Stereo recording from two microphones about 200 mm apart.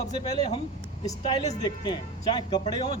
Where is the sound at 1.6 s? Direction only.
20° left (ahead or behind).